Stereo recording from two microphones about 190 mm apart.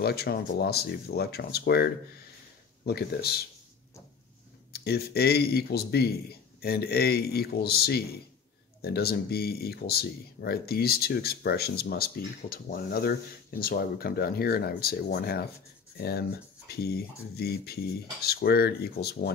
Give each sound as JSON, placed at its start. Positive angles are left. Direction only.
{"t": 0.0, "sound": "speech", "side_deg": 55}
{"t": 4.7, "sound": "speech", "side_deg": 55}